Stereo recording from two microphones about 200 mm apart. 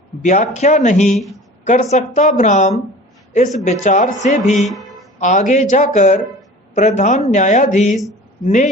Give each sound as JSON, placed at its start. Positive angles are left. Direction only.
{"t": 0.2, "sound": "a woman's voice", "side_deg": 35}
{"t": 1.1, "sound": "speech", "side_deg": 0}
{"t": 1.6, "sound": "a woman's voice", "side_deg": 35}